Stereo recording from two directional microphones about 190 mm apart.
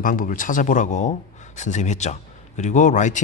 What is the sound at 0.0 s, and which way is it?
Speech, 45° left (ahead or behind).